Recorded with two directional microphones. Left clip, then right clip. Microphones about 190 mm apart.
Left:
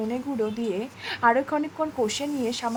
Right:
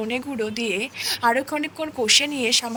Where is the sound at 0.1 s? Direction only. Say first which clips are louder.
Right 2 dB; 55° right (ahead or behind).